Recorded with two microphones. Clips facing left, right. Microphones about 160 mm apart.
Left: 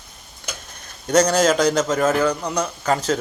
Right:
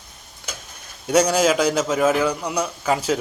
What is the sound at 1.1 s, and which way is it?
A man's voice, 10° right (ahead or behind).